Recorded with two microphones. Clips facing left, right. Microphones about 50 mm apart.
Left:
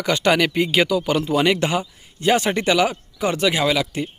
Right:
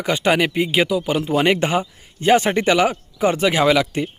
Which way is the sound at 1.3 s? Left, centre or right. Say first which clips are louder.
Right 2 dB; right.